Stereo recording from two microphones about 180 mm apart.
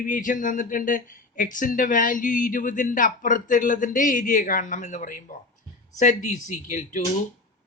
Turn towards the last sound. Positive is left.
turn(degrees=45)  # may be behind; listen again after turning